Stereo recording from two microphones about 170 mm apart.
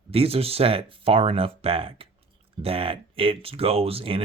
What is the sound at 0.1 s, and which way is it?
Speech, 35° right (ahead or behind).